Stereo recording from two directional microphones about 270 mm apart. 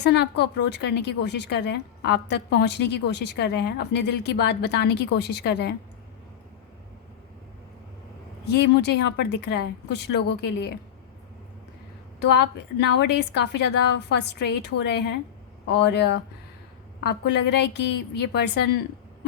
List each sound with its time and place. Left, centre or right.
0.0 s a woman's voice: left
8.5 s a woman's voice: left
13.0 s a woman's voice: left